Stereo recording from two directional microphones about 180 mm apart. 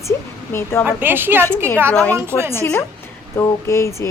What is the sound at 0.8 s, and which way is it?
Speech, 10° right (ahead or behind).